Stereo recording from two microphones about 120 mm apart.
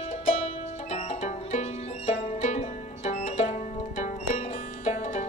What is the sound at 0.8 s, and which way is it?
Music, 65° left (ahead or behind).